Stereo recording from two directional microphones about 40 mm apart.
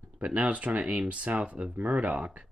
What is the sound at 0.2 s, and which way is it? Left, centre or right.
Speech, right.